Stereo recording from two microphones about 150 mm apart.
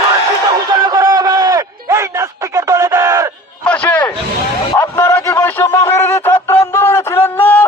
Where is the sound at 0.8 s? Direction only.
25° right (ahead or behind).